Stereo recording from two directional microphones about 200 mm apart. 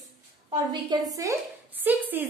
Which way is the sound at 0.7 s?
20° right (ahead or behind).